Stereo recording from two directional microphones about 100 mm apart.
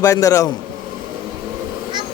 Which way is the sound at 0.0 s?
35° left (ahead or behind).